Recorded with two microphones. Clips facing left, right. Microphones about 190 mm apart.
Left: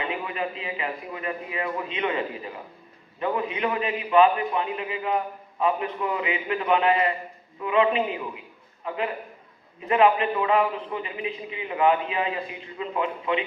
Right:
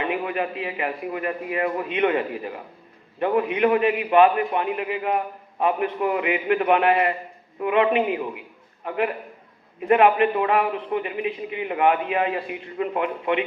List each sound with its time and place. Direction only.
0.0 s a man's voice: 55° right (ahead or behind)
9.8 s a man's voice: 55° right (ahead or behind)